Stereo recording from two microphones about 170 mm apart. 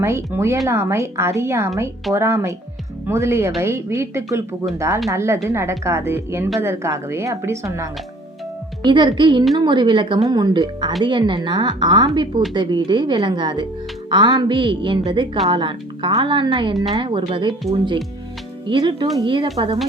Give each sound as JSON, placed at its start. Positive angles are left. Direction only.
{"t": 0.0, "sound": "speech", "side_deg": -15}
{"t": 8.8, "sound": "speech", "side_deg": -25}
{"t": 18.7, "sound": "speech", "side_deg": -30}